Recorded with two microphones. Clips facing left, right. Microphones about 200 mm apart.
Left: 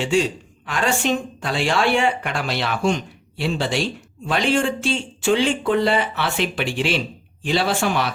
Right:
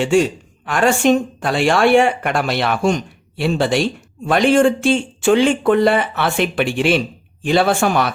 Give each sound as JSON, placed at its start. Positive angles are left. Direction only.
{"t": 0.0, "sound": "speech", "side_deg": -55}